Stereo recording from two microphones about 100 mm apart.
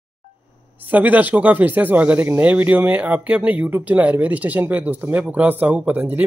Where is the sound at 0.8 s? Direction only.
15° right (ahead or behind).